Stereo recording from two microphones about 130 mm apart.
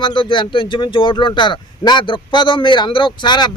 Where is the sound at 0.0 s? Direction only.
40° left (ahead or behind).